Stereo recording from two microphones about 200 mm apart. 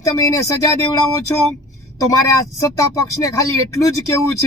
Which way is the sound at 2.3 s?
15° left (ahead or behind).